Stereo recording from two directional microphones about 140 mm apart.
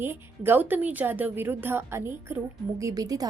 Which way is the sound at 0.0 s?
15° right (ahead or behind).